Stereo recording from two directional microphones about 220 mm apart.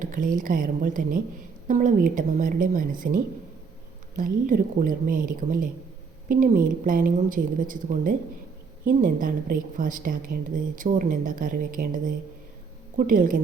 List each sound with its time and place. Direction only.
0.0 s a woman's voice: 40° right (ahead or behind)
4.2 s a woman's voice: 40° right (ahead or behind)